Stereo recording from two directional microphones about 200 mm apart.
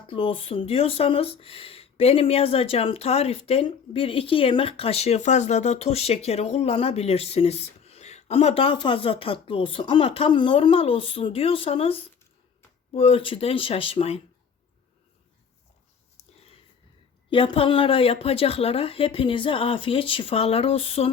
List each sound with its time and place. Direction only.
0.1 s speech: 25° left (ahead or behind)
17.2 s speech: 25° left (ahead or behind)